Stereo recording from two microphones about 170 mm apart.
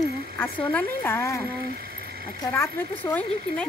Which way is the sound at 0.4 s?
15° left (ahead or behind).